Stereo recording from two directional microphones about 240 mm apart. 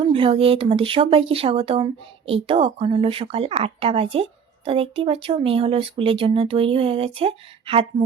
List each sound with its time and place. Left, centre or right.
0.0 s speech: right